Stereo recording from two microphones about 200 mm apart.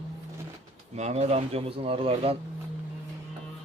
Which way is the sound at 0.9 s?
35° right (ahead or behind).